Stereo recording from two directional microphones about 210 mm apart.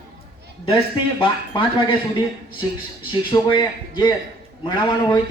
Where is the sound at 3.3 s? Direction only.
20° left (ahead or behind).